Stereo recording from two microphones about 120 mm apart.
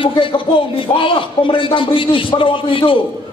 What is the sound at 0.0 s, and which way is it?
Speech, 45° left (ahead or behind).